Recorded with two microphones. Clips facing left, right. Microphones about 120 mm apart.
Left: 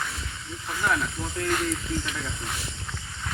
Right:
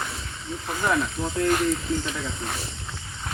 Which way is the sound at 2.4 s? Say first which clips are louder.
Right 3 dB; 35° right (ahead or behind).